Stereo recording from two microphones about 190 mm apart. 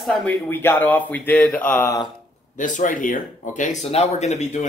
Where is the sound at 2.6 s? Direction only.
45° left (ahead or behind).